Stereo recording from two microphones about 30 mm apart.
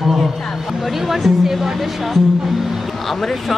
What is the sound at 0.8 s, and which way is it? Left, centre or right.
Speech, centre.